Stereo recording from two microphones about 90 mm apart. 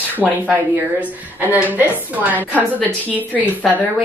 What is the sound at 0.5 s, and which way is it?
A woman's voice, 20° right (ahead or behind).